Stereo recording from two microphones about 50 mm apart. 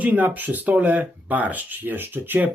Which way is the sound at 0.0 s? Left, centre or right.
Right.